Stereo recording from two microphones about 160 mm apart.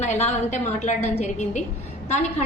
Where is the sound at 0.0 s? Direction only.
45° left (ahead or behind).